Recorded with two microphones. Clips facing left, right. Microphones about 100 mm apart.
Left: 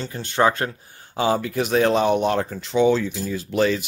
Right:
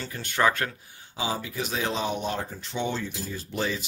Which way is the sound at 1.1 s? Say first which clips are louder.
Left 9 dB; 60° left (ahead or behind).